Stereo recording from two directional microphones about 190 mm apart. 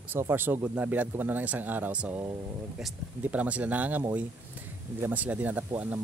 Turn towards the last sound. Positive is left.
turn(degrees=-10)  # may be behind; listen again after turning